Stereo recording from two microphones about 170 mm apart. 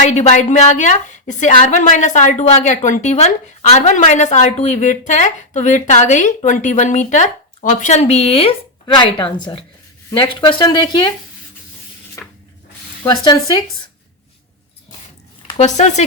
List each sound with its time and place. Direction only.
0.1 s a woman's voice: 45° left (ahead or behind); by 11.1 s 25° left (ahead or behind)
12.2 s a sound: 15° left (ahead or behind)
13.1 s speech: 25° left (ahead or behind)
15.5 s speech: 40° left (ahead or behind)